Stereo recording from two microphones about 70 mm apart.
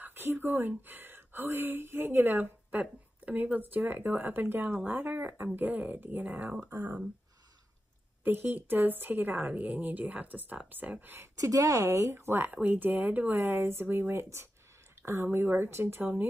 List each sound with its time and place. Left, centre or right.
0.0 s a woman's voice: right
6.7 s speech: right
8.2 s a woman's voice: right
11.3 s speech: right